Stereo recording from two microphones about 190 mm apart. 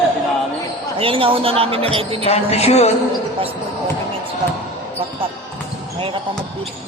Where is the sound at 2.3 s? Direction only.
35° left (ahead or behind).